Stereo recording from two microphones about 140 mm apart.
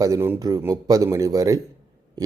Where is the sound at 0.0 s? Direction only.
20° right (ahead or behind).